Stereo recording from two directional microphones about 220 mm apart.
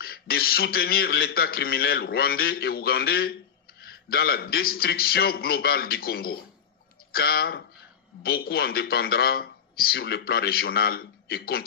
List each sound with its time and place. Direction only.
0.0 s a man's voice: 45° left (ahead or behind)